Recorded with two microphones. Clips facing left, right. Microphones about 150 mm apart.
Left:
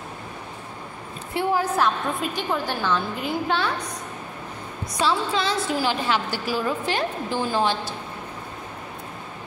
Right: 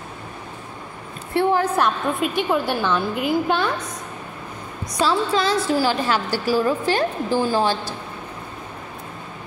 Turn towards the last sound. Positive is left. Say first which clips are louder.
# right 4 dB
turn(degrees=-35)  # may be behind; listen again after turning